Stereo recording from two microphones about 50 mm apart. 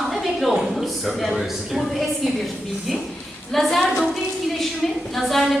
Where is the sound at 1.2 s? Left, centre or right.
Centre.